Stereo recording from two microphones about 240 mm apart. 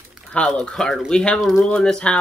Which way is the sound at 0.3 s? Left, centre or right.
Centre.